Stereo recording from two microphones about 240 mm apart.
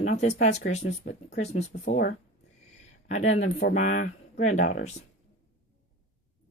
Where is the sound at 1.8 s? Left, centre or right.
Left.